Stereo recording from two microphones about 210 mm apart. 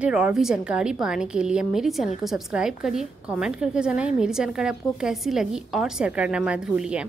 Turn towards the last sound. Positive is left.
turn(degrees=-5)  # may be behind; listen again after turning